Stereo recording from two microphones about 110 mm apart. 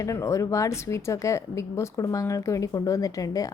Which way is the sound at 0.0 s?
30° left (ahead or behind).